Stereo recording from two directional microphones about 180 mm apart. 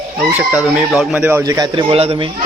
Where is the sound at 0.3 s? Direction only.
10° right (ahead or behind).